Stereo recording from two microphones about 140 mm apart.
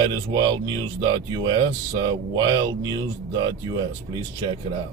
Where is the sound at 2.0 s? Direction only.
30° right (ahead or behind).